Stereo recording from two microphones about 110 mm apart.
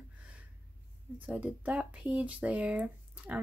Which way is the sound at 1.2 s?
15° right (ahead or behind).